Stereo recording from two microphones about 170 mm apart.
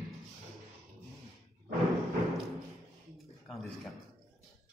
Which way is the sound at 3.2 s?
Centre (ahead or behind).